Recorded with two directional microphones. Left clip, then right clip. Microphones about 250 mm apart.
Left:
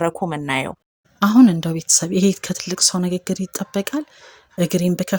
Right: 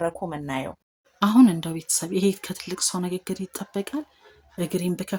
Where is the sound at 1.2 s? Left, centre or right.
Left.